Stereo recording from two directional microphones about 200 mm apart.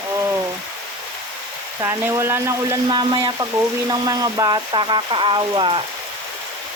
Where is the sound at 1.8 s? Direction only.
15° right (ahead or behind).